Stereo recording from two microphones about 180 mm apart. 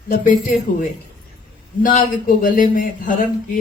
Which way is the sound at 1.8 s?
50° left (ahead or behind).